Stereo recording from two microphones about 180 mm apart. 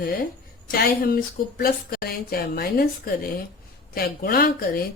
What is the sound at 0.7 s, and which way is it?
Speech, 55° left (ahead or behind).